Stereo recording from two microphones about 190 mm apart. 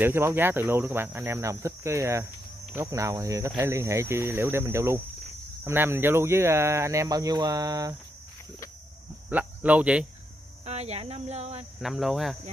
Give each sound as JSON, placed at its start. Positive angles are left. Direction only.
{"t": 0.0, "sound": "speech", "side_deg": -10}
{"t": 9.3, "sound": "speech", "side_deg": -10}
{"t": 10.6, "sound": "speech", "side_deg": -35}
{"t": 11.8, "sound": "cricket", "side_deg": 0}